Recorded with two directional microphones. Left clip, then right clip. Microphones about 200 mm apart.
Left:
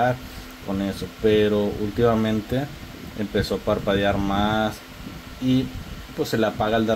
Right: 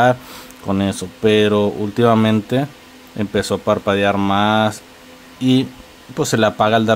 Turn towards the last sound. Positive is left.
turn(degrees=-20)  # may be behind; listen again after turning